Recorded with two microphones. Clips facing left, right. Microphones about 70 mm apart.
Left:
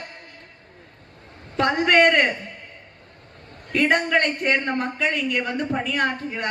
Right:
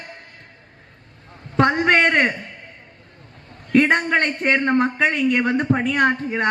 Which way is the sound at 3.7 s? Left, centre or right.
Right.